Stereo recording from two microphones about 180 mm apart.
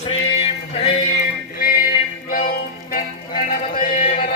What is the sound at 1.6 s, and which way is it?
Music, 50° left (ahead or behind).